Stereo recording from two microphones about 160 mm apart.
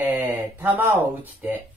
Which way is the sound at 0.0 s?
15° right (ahead or behind).